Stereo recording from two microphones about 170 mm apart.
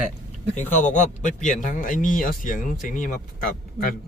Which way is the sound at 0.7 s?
45° left (ahead or behind).